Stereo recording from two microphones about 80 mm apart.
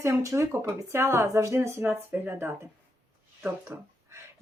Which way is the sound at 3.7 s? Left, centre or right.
Right.